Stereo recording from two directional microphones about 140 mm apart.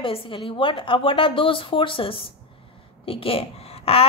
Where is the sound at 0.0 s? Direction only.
40° left (ahead or behind).